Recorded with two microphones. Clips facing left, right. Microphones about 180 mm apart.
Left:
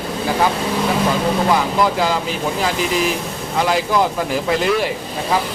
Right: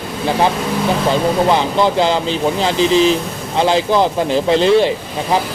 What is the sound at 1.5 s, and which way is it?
Speech, 25° right (ahead or behind).